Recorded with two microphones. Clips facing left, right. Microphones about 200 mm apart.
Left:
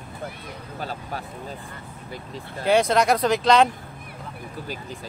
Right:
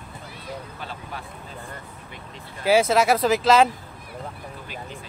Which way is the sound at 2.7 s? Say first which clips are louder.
Right 1 dB; 5° right (ahead or behind).